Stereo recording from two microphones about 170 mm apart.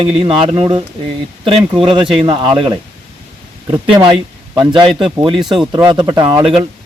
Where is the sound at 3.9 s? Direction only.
30° right (ahead or behind).